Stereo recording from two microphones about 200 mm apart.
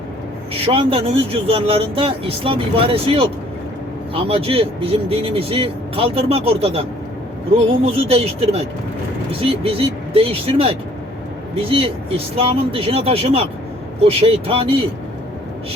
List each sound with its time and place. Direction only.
0.5 s speech: 30° right (ahead or behind)